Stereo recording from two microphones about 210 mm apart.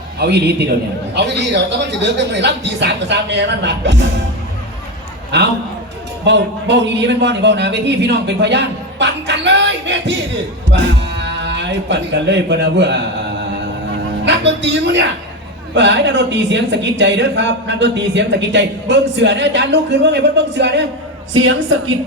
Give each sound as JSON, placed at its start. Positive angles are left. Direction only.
{"t": 0.2, "sound": "a man's voice", "side_deg": -50}
{"t": 5.3, "sound": "a man's voice", "side_deg": -55}
{"t": 14.3, "sound": "speech", "side_deg": -60}
{"t": 21.3, "sound": "a woman's voice", "side_deg": -65}